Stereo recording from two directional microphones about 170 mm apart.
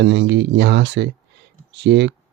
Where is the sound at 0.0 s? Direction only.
90° right.